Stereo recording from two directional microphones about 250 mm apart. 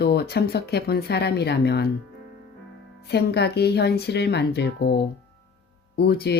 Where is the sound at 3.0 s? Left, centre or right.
Left.